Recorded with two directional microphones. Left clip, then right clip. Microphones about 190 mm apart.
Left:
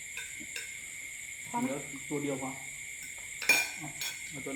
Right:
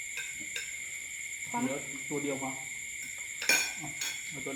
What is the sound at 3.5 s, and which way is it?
Dishes, centre (ahead or behind).